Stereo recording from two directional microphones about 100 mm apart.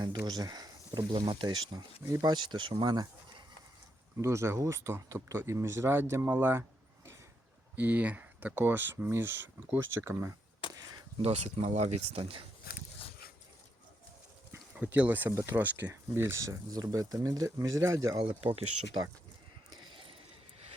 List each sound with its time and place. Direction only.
0.0 s speech: 40° right (ahead or behind)
4.2 s speech: 30° right (ahead or behind)
7.8 s speech: 15° right (ahead or behind)
11.2 s speech: 90° right; by 12.4 s 70° right (ahead or behind)
14.5 s a sound: 15° right (ahead or behind)
15.4 s speech: 30° right (ahead or behind)
15.6 s speech: 20° right (ahead or behind)
18.2 s speech: 65° right (ahead or behind)
19.9 s a sound: 60° right (ahead or behind)